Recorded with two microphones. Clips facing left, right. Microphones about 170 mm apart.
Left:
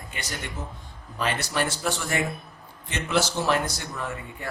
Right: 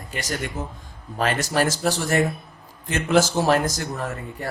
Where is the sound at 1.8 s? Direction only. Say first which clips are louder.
Right 6 dB; 35° right (ahead or behind).